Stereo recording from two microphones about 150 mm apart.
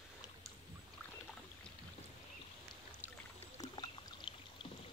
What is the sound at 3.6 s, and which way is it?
Boat, 30° left (ahead or behind).